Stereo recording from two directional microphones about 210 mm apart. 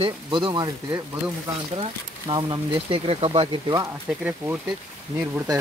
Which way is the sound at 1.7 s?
20° right (ahead or behind).